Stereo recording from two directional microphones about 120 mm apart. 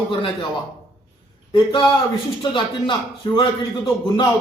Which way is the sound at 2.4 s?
45° left (ahead or behind).